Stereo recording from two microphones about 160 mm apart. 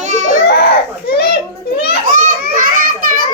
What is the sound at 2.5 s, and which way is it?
Children playing, 60° right (ahead or behind).